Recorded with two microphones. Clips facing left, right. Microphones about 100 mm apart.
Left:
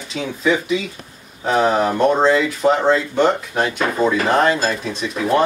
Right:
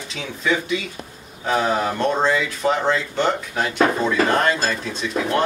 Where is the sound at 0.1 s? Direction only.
10° left (ahead or behind).